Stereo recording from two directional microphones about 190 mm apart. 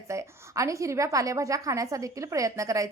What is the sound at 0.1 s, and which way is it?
A woman's voice, 15° right (ahead or behind).